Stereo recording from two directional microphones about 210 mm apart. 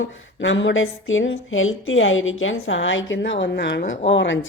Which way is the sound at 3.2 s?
55° left (ahead or behind).